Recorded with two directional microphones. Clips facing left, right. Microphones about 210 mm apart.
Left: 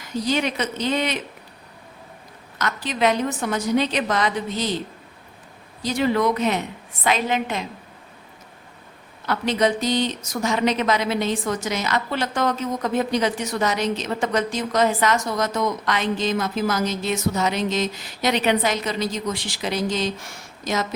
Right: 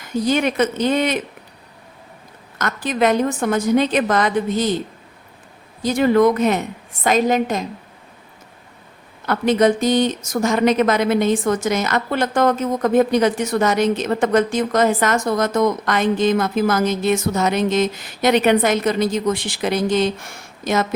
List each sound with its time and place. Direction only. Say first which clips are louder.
0.0 s speech: right 5 dB; 50° right (ahead or behind)
2.6 s speech: right 4 dB; 50° right (ahead or behind)
5.8 s speech: right 6 dB; 50° right (ahead or behind)
9.2 s speech: right 5 dB; 50° right (ahead or behind)